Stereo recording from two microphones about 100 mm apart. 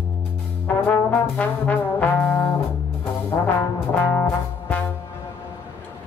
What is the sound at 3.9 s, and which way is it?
Music, 20° left (ahead or behind).